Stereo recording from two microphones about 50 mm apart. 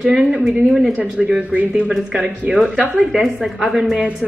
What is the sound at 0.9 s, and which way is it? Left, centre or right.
Speech, right.